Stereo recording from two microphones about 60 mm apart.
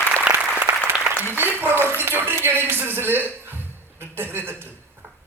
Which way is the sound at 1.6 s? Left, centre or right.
Right.